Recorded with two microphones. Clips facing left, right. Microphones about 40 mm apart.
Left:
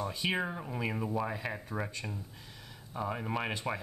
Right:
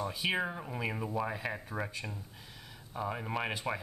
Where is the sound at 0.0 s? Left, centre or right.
Centre.